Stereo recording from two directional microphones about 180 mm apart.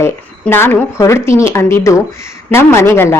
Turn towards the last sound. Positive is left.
turn(degrees=15)  # may be behind; listen again after turning